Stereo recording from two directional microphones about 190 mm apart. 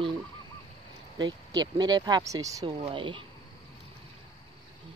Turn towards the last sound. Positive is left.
turn(degrees=-25)  # may be behind; listen again after turning